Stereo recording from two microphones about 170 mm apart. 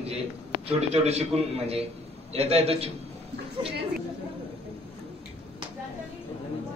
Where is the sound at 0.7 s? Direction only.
40° right (ahead or behind).